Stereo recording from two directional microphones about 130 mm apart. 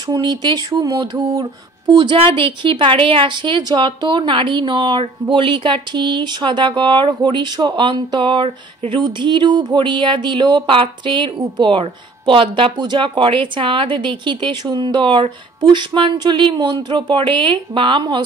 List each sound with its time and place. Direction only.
0.0 s speech: 30° right (ahead or behind)